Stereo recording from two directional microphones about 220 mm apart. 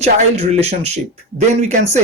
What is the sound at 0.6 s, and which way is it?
Speech, 30° right (ahead or behind).